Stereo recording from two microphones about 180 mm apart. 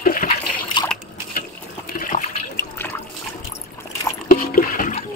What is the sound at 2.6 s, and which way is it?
Liquid, 10° left (ahead or behind).